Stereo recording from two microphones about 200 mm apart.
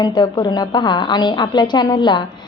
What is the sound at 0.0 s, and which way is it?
A woman's voice, 20° left (ahead or behind).